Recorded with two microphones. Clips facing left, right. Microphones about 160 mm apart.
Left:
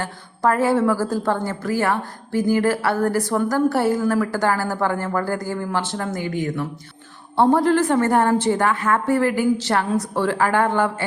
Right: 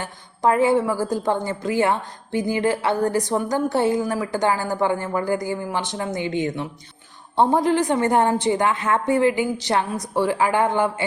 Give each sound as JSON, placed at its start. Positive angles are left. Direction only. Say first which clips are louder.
{"t": 0.0, "sound": "a woman's voice", "louder": "even", "side_deg": -15}